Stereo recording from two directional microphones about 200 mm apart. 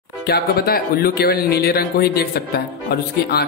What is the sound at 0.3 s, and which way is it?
Speech, 50° left (ahead or behind).